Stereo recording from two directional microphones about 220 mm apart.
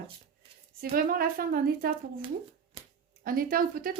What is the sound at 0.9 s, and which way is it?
Speech, 40° right (ahead or behind).